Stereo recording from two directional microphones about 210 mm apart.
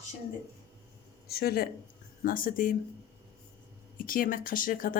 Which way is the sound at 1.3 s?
50° left (ahead or behind).